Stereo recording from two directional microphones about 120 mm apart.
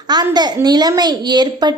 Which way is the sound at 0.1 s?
35° right (ahead or behind).